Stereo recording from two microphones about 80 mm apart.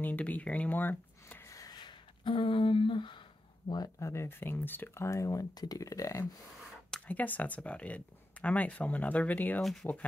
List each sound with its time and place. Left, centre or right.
0.0 s speech: centre
1.5 s gasp: left
1.8 s a sound: left
4.0 s speech: left
7.1 s speech: centre
9.6 s speech: centre